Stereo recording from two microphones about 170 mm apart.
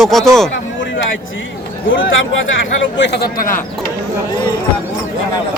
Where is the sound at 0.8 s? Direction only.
90° left.